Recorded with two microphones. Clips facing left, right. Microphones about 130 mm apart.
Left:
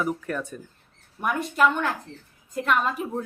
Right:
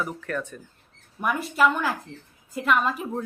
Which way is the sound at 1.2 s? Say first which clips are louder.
Even; centre (ahead or behind).